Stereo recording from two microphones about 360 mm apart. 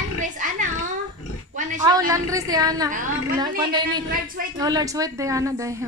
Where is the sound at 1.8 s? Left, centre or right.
Centre.